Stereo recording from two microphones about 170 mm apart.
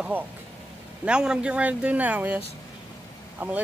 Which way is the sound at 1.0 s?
5° right (ahead or behind).